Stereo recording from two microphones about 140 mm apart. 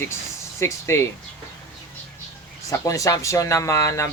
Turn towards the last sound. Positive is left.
turn(degrees=20)  # may be behind; listen again after turning